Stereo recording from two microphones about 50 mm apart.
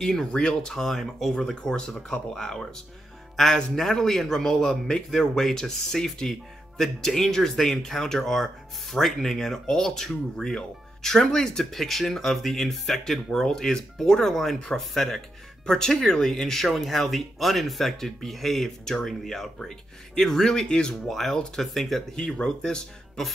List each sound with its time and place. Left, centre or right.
0.0 s speech: centre
0.3 s speech: centre
22.1 s speech: centre